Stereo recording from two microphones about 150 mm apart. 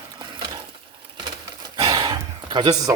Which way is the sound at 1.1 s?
25° right (ahead or behind).